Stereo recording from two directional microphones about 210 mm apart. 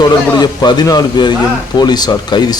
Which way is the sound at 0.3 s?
20° left (ahead or behind).